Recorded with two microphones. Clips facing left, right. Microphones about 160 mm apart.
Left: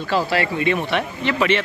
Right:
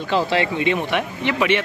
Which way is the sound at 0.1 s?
20° right (ahead or behind).